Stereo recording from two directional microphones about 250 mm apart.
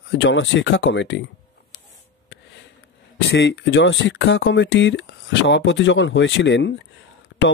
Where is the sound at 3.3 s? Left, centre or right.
Left.